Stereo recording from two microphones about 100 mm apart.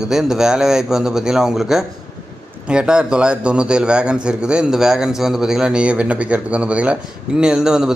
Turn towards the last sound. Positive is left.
turn(degrees=-5)  # may be behind; listen again after turning